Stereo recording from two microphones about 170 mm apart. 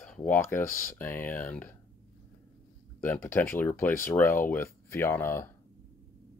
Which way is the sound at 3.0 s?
15° left (ahead or behind).